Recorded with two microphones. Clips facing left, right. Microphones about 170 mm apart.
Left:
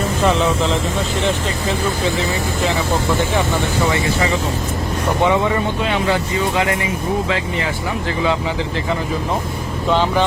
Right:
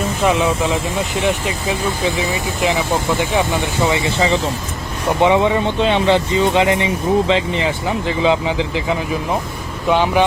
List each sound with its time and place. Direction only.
0.3 s speech: 10° right (ahead or behind)